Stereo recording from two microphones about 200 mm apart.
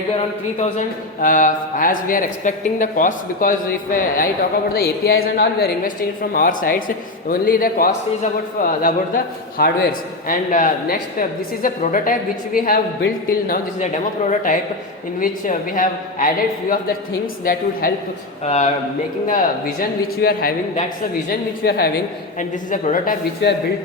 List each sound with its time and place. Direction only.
0.6 s a man's voice: 40° left (ahead or behind)
4.7 s a man's voice: 50° left (ahead or behind)
22.4 s a man's voice: 40° left (ahead or behind)
23.4 s speech: 60° left (ahead or behind)